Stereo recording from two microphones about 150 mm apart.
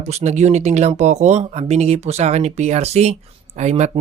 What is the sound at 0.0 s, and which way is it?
Speech, 50° right (ahead or behind).